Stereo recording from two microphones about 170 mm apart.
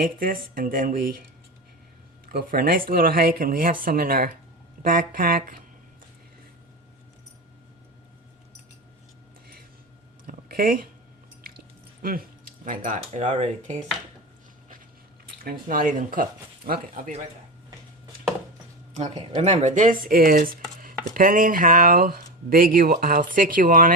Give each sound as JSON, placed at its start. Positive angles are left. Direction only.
{"t": 0.0, "sound": "chopping", "side_deg": -60}
{"t": 2.3, "sound": "chopping", "side_deg": -60}
{"t": 10.2, "sound": "a sound", "side_deg": -55}
{"t": 12.0, "sound": "keys jangling", "side_deg": -55}
{"t": 13.1, "sound": "speech", "side_deg": -45}
{"t": 15.4, "sound": "speech", "side_deg": -55}
{"t": 16.6, "sound": "chopping", "side_deg": -60}
{"t": 19.4, "sound": "chopping", "side_deg": -40}